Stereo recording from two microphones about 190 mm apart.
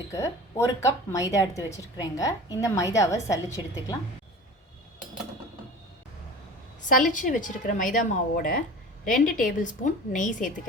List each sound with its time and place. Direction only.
0.1 s a woman's voice: 15° left (ahead or behind)
6.8 s a woman's voice: 40° left (ahead or behind)